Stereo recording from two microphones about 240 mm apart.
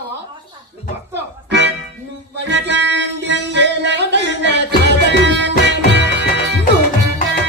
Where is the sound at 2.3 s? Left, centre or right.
Right.